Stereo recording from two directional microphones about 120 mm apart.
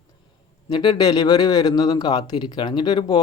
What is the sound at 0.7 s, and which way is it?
Speech, 35° left (ahead or behind).